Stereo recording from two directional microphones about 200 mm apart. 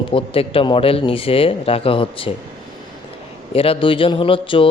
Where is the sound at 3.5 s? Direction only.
30° left (ahead or behind).